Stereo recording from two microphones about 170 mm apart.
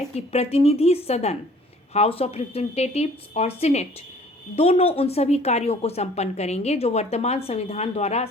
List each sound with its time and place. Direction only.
0.3 s a woman's voice: 35° left (ahead or behind)